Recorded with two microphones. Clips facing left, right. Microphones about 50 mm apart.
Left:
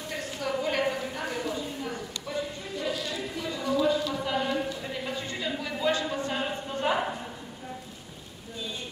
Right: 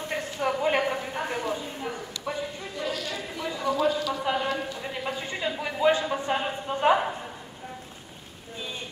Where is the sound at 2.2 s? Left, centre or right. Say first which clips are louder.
Right 2 dB; right.